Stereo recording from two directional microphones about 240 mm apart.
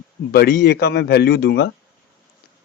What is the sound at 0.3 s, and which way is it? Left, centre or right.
Speech, left.